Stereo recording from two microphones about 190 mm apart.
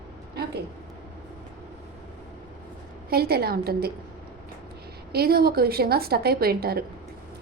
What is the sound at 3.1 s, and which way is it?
Speech, 55° right (ahead or behind).